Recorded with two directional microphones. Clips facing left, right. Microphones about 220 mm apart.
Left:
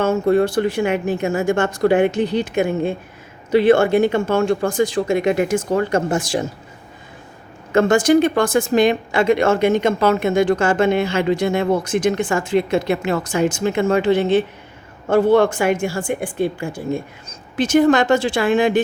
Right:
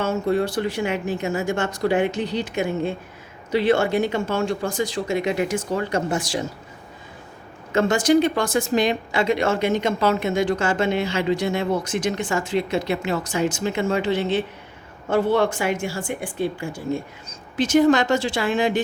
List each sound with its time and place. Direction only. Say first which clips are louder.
0.0 s speech: left 6 dB; 50° left (ahead or behind)
7.7 s speech: left 4 dB; 50° left (ahead or behind)